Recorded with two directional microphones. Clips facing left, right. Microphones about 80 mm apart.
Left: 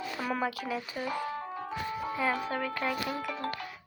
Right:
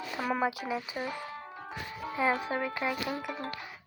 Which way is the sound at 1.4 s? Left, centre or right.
Left.